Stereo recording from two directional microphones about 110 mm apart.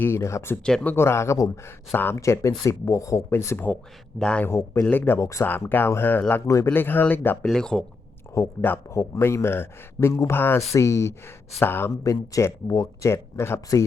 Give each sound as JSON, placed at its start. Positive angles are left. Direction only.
{"t": 0.0, "sound": "a man's voice", "side_deg": 25}
{"t": 0.6, "sound": "speech", "side_deg": 10}
{"t": 0.9, "sound": "a man's voice", "side_deg": 25}
{"t": 4.2, "sound": "speech", "side_deg": 10}
{"t": 4.4, "sound": "a man's voice", "side_deg": 20}
{"t": 7.4, "sound": "speech", "side_deg": 5}
{"t": 8.4, "sound": "a man's voice", "side_deg": 20}